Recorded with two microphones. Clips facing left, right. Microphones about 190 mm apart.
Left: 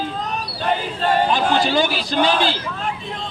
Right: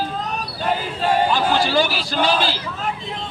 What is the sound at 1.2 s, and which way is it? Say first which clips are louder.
Speech: left 1 dB; 20° left (ahead or behind).